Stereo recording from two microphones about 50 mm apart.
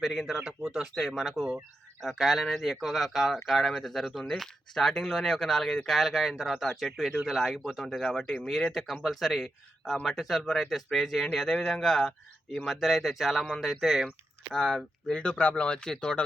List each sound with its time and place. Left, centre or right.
0.0 s speech: centre
5.9 s speech: centre
13.4 s speech: centre
14.5 s speech: centre